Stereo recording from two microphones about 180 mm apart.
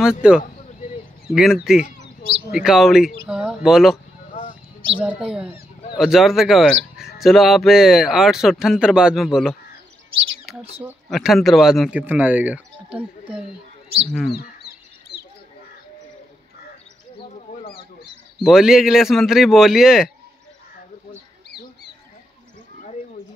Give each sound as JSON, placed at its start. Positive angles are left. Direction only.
{"t": 0.0, "sound": "speech", "side_deg": -5}
{"t": 4.3, "sound": "a sound", "side_deg": 45}
{"t": 5.0, "sound": "speech", "side_deg": -5}
{"t": 10.5, "sound": "rodents", "side_deg": 0}
{"t": 11.1, "sound": "speech", "side_deg": 0}
{"t": 15.1, "sound": "bird", "side_deg": 60}
{"t": 18.4, "sound": "speech", "side_deg": -5}